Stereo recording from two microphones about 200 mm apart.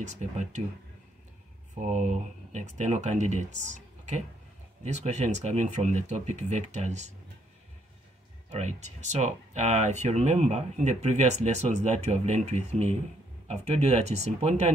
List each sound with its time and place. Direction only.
0.0 s speech: 35° right (ahead or behind)
1.9 s speech: 35° right (ahead or behind)
8.5 s speech: 35° right (ahead or behind)